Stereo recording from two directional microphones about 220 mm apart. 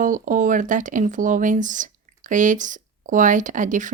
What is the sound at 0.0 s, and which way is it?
Speech, 35° right (ahead or behind).